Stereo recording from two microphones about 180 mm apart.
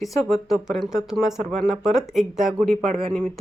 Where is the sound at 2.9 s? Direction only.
30° right (ahead or behind).